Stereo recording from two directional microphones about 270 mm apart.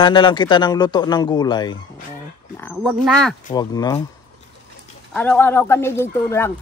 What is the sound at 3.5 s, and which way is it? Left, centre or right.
Speech, centre.